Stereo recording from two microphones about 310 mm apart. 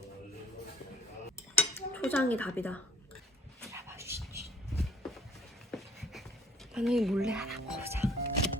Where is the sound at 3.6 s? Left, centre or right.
Centre.